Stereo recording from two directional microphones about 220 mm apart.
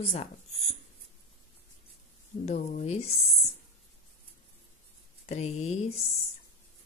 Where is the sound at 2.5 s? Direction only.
30° left (ahead or behind).